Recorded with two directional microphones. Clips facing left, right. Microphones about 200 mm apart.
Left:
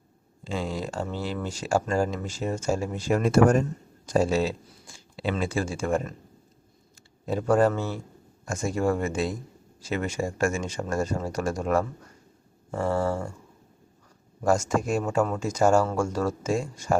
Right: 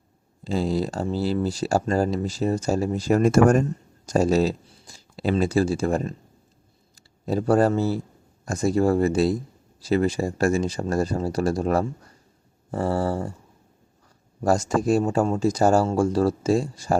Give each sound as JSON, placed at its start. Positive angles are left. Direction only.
{"t": 0.4, "sound": "speech", "side_deg": -35}
{"t": 14.4, "sound": "speech", "side_deg": -35}